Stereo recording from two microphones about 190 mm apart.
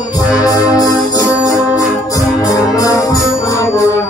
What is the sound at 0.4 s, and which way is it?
Music, 20° left (ahead or behind).